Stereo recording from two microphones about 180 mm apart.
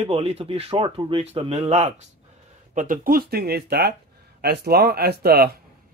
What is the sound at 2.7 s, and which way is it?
Speech, 50° right (ahead or behind).